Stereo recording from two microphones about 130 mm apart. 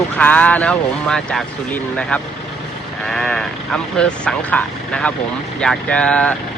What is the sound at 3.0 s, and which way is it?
Speech, 5° left (ahead or behind).